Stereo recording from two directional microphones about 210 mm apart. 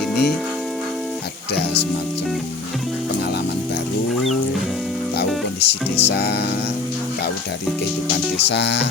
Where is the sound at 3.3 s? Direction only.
50° left (ahead or behind).